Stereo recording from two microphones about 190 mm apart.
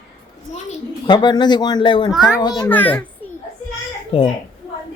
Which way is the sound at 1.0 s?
25° left (ahead or behind).